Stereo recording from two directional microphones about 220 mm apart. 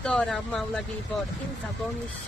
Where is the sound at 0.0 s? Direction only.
Centre (ahead or behind).